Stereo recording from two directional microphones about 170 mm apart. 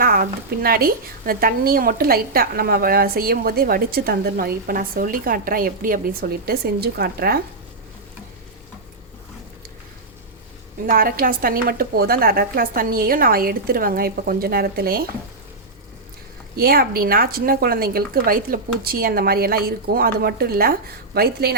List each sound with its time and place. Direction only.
0.0 s a woman's voice: 60° right (ahead or behind)
10.8 s a woman's voice: 60° right (ahead or behind)
16.6 s a woman's voice: 60° right (ahead or behind)